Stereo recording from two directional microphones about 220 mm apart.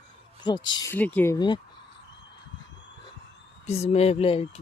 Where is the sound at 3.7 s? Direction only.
30° left (ahead or behind).